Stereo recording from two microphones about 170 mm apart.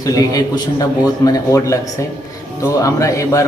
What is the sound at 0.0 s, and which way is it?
Speech, 20° left (ahead or behind).